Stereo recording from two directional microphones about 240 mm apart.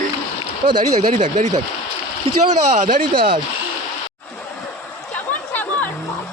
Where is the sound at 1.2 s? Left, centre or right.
Right.